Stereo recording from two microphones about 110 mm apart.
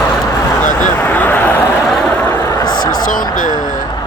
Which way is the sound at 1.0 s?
15° left (ahead or behind).